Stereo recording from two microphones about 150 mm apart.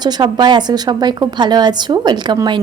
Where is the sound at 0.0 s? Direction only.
30° right (ahead or behind).